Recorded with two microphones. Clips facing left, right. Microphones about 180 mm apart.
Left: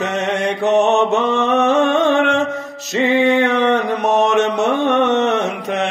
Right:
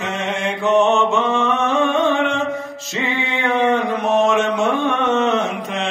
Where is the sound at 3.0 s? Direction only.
70° left (ahead or behind).